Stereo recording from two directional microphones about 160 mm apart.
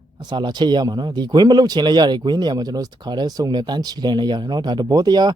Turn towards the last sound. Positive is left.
turn(degrees=-25)  # may be behind; listen again after turning